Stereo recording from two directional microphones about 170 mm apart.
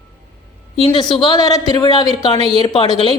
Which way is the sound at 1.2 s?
25° left (ahead or behind).